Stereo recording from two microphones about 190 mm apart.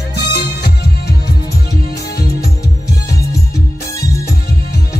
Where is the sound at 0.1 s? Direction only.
55° left (ahead or behind).